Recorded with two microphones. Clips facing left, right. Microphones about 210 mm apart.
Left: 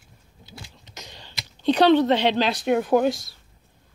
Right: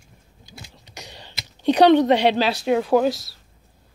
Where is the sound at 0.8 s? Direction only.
15° right (ahead or behind).